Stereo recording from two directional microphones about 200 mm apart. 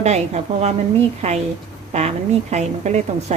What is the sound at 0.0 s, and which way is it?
A woman's voice, 35° right (ahead or behind).